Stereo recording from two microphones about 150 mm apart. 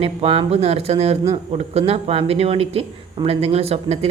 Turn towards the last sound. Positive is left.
turn(degrees=-40)  # may be behind; listen again after turning